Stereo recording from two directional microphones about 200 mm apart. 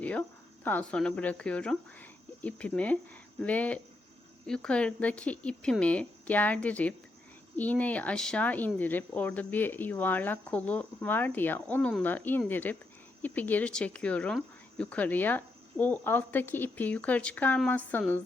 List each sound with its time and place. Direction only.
0.0 s speech: 10° left (ahead or behind)